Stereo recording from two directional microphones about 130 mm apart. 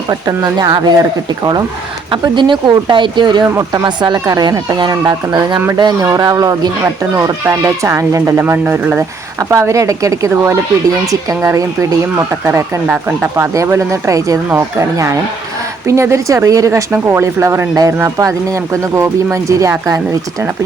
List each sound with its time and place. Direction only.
0.1 s speech: 30° right (ahead or behind)
2.0 s speech: 35° right (ahead or behind)
3.4 s speech: 25° right (ahead or behind)